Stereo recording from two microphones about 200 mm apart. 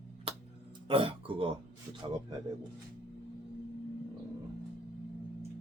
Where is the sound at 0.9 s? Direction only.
25° right (ahead or behind).